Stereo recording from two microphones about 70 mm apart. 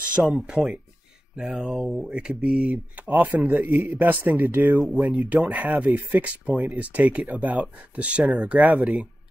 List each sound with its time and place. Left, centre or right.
0.2 s speech: centre
1.6 s speech: centre
3.0 s a man's voice: right
4.7 s speech: centre
5.4 s speech: centre